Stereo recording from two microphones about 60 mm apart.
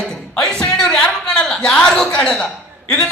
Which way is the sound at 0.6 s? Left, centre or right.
Centre.